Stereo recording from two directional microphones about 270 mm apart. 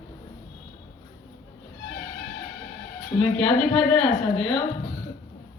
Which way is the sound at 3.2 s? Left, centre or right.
Centre.